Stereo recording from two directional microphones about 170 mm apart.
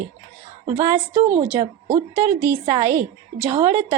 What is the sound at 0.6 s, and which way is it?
A woman's voice, 40° right (ahead or behind).